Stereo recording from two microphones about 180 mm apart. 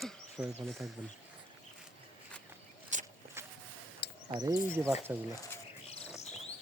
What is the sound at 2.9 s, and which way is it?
Walk, 45° right (ahead or behind).